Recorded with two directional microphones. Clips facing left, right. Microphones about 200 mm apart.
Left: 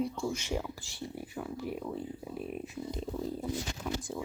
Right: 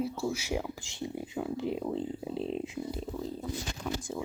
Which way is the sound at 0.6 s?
20° right (ahead or behind).